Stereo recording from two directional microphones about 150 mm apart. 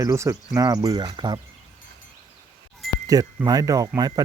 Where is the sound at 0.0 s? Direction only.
20° right (ahead or behind).